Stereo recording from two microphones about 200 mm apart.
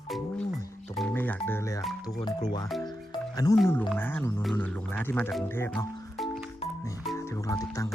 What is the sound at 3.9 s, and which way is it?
Speech, 10° left (ahead or behind).